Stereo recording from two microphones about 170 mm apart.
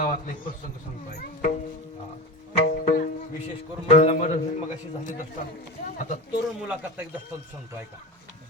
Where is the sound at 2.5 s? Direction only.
50° left (ahead or behind).